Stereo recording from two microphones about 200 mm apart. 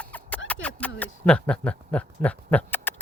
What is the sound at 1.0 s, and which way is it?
Speech, 5° left (ahead or behind).